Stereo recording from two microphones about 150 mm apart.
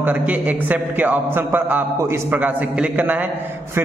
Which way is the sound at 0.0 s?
10° right (ahead or behind).